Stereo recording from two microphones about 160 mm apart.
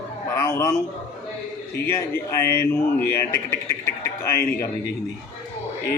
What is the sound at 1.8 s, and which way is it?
A man's voice, 15° left (ahead or behind).